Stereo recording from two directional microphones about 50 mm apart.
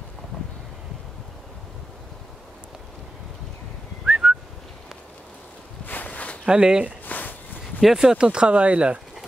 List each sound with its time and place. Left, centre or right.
4.0 s whistling: centre
5.9 s walk: left
6.4 s speech: centre
7.1 s a sound: left
7.8 s speech: centre